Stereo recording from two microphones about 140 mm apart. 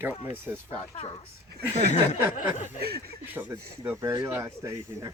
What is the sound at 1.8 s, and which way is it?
Speech, 55° left (ahead or behind).